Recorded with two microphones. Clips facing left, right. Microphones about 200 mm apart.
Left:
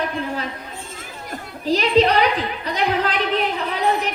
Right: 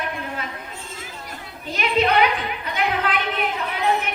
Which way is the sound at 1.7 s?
35° left (ahead or behind).